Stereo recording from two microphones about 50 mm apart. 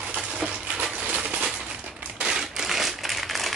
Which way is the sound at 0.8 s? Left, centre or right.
Right.